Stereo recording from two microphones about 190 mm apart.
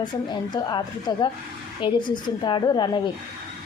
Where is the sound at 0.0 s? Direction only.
25° left (ahead or behind).